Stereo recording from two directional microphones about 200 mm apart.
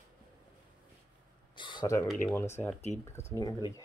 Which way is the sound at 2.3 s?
10° left (ahead or behind).